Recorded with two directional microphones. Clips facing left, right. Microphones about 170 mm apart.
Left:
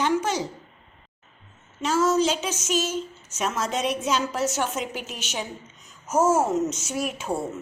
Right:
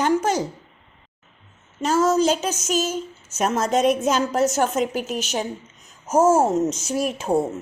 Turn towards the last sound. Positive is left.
turn(degrees=-40)  # may be behind; listen again after turning